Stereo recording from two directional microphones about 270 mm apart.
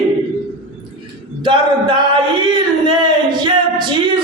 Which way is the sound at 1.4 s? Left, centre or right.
Centre.